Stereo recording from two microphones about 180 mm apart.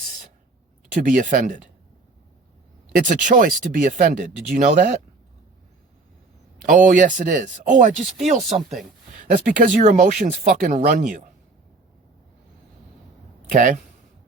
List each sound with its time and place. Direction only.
1.0 s speech: 50° right (ahead or behind)
3.0 s speech: 45° right (ahead or behind)
6.7 s speech: 45° right (ahead or behind)
7.9 s speech: centre (ahead or behind)
8.4 s speech: 35° right (ahead or behind)
9.1 s speech: 45° right (ahead or behind)
13.5 s speech: 45° right (ahead or behind)